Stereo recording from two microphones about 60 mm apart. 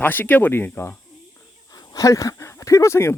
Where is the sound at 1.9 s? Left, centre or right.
Left.